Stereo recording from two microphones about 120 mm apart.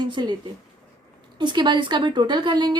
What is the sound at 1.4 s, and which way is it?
A woman's voice, 40° right (ahead or behind).